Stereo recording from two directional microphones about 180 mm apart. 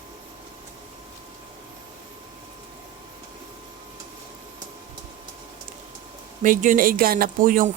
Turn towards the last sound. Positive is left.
turn(degrees=-50)  # may be behind; listen again after turning